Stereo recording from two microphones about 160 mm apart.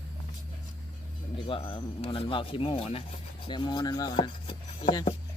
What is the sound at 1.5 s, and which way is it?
Speech, 35° left (ahead or behind).